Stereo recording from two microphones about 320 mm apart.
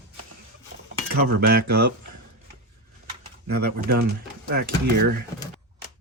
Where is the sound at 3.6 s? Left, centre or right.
Right.